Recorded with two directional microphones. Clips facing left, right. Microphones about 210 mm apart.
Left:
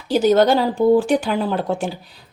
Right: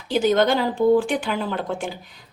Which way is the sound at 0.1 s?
40° left (ahead or behind).